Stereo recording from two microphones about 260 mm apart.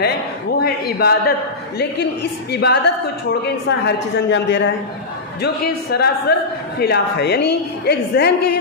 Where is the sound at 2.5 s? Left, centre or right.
Left.